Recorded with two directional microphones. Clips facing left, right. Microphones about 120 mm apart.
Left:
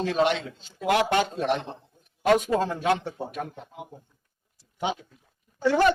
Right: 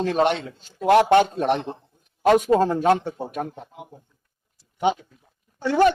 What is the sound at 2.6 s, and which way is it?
Speech, 45° right (ahead or behind).